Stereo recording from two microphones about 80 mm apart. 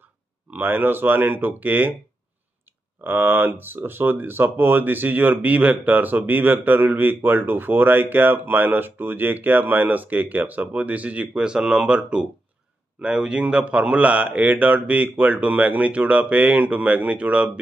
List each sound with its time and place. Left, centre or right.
0.5 s speech: right
3.0 s a man's voice: right